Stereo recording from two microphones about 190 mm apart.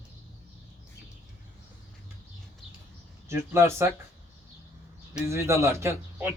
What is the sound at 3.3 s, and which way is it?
Speech, 15° right (ahead or behind).